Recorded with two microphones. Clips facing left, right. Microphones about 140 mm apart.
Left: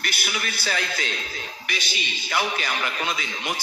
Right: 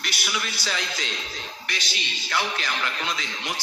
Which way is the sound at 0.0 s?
55° left (ahead or behind).